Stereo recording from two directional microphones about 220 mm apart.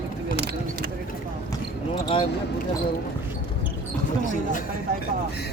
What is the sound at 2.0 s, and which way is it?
Speech, 25° left (ahead or behind).